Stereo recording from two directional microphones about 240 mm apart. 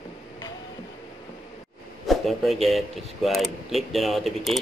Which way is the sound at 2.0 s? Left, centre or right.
Centre.